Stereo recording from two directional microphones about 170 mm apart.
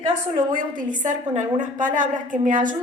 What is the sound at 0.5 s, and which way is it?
A woman's voice, 50° right (ahead or behind).